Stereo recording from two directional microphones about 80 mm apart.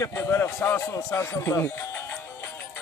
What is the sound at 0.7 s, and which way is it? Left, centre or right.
Speech, left.